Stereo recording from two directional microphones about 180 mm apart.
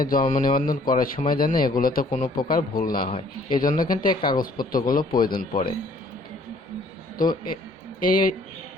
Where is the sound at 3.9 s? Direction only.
50° left (ahead or behind).